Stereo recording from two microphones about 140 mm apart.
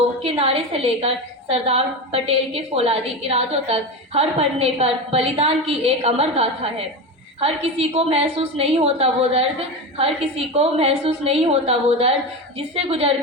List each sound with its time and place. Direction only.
0.2 s a woman's voice: 45° right (ahead or behind)